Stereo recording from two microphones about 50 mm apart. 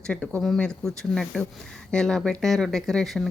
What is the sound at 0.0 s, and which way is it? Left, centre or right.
Speech, left.